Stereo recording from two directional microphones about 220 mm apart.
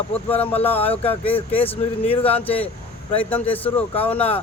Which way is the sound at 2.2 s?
5° left (ahead or behind).